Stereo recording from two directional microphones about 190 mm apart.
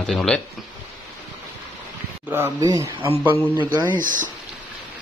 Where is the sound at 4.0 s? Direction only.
45° right (ahead or behind).